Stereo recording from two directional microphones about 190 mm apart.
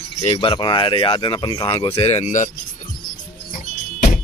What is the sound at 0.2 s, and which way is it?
Speech, 30° left (ahead or behind).